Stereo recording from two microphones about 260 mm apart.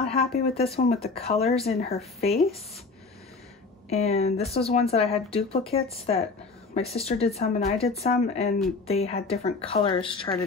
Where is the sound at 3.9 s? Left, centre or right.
Left.